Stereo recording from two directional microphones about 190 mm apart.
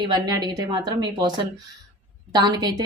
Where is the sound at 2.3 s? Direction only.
20° right (ahead or behind).